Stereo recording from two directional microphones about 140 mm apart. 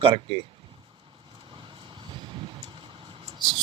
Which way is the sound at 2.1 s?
35° right (ahead or behind).